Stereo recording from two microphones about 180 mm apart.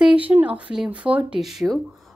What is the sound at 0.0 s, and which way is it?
Speech, 5° right (ahead or behind).